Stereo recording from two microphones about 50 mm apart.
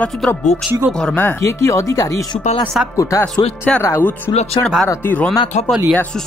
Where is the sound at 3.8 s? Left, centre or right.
Left.